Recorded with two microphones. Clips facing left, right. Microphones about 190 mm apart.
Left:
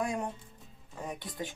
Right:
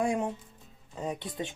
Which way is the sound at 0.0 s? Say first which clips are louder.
Right 5 dB; 25° right (ahead or behind).